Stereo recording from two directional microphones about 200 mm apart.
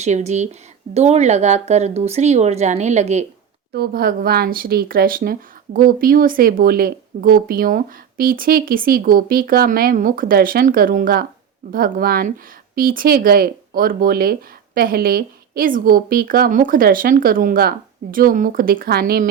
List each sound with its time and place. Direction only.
0.0 s a woman's voice: 35° right (ahead or behind)
3.8 s a woman's voice: 50° right (ahead or behind)